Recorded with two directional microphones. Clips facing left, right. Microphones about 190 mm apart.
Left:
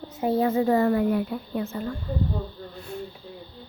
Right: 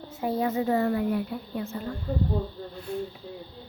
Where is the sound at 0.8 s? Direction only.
85° left.